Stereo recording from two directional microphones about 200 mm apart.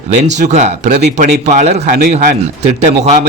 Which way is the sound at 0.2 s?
35° right (ahead or behind).